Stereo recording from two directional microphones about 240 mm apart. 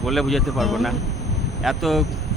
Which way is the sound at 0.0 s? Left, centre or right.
Centre.